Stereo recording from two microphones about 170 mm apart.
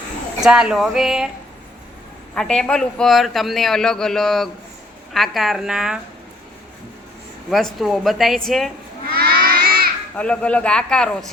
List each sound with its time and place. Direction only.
0.4 s a man's voice: 5° right (ahead or behind)
2.3 s a man's voice: 5° left (ahead or behind)
7.5 s a man's voice: centre (ahead or behind)
9.1 s a sound: 65° right (ahead or behind)
10.2 s a man's voice: 5° left (ahead or behind)